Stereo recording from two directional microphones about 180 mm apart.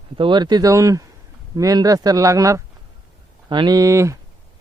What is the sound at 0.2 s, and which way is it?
Speech, 25° right (ahead or behind).